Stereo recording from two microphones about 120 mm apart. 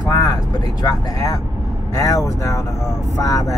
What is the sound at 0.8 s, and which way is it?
Speech, 30° left (ahead or behind).